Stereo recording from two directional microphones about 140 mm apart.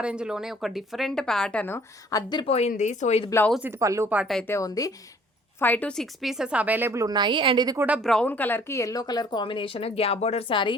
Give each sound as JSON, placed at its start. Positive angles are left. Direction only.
{"t": 0.0, "sound": "speech", "side_deg": -5}
{"t": 2.0, "sound": "speech", "side_deg": 30}
{"t": 2.5, "sound": "speech", "side_deg": 50}
{"t": 3.8, "sound": "a woman's voice", "side_deg": -20}
{"t": 4.4, "sound": "speech", "side_deg": 20}
{"t": 5.5, "sound": "a woman's voice", "side_deg": 15}
{"t": 6.0, "sound": "a woman's voice", "side_deg": -5}
{"t": 7.8, "sound": "speech", "side_deg": -10}
{"t": 8.0, "sound": "a woman's voice", "side_deg": 5}
{"t": 10.5, "sound": "a woman's voice", "side_deg": 35}